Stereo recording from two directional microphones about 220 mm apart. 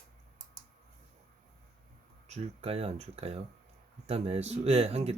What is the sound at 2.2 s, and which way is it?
Speech, 30° right (ahead or behind).